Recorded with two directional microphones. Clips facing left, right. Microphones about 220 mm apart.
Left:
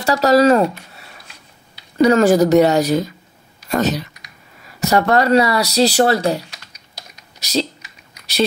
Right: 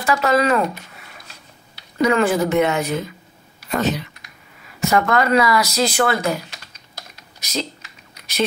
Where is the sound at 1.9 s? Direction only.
35° left (ahead or behind).